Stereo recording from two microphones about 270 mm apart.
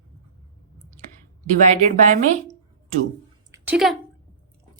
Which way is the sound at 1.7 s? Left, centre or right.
Right.